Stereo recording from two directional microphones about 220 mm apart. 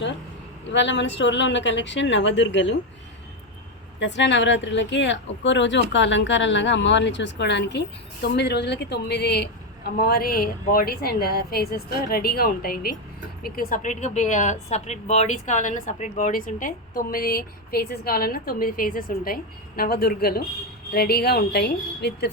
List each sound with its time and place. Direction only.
0.7 s speech: 55° left (ahead or behind)
4.0 s a woman's voice: 55° left (ahead or behind)